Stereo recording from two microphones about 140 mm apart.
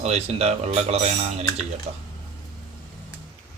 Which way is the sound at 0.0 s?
50° right (ahead or behind).